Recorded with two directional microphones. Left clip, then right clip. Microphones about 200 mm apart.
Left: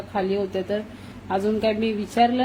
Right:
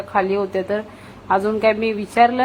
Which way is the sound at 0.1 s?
Centre (ahead or behind).